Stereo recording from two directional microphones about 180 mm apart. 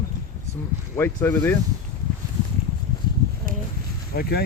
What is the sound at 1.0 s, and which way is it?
Speech, 15° left (ahead or behind).